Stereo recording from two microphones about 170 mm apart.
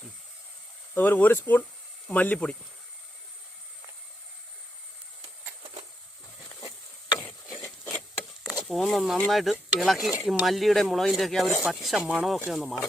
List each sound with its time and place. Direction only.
0.9 s speech: 10° left (ahead or behind)
7.2 s a sound: 5° left (ahead or behind)
10.2 s speech: centre (ahead or behind)